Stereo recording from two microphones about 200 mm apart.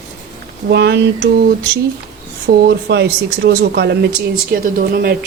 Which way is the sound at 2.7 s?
60° right (ahead or behind).